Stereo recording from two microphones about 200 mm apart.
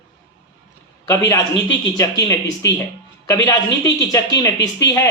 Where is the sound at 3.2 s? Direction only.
15° left (ahead or behind).